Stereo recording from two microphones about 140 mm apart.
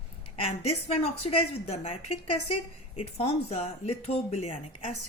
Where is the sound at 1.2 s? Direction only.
45° left (ahead or behind).